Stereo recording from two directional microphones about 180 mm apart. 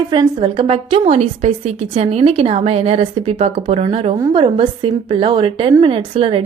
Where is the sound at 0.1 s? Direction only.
25° right (ahead or behind).